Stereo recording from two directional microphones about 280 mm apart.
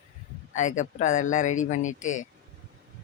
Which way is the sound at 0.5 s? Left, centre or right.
Left.